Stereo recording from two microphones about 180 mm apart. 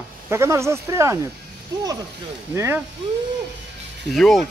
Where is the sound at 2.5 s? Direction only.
15° right (ahead or behind).